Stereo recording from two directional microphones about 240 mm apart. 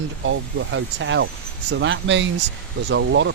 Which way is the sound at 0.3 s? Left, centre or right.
Right.